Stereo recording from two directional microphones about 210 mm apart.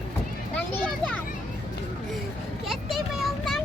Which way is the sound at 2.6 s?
Centre (ahead or behind).